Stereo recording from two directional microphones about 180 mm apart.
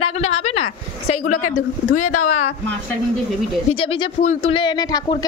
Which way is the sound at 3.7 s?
30° left (ahead or behind).